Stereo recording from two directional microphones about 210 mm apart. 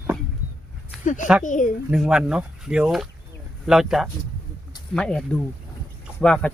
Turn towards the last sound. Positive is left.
turn(degrees=5)  # may be behind; listen again after turning